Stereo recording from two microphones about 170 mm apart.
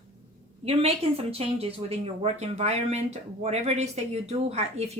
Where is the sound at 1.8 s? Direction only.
35° right (ahead or behind).